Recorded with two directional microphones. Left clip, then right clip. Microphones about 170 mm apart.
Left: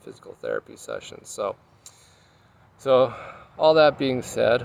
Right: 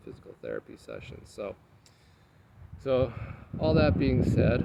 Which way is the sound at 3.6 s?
5° left (ahead or behind).